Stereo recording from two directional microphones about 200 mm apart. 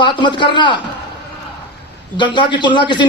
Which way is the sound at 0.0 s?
25° left (ahead or behind).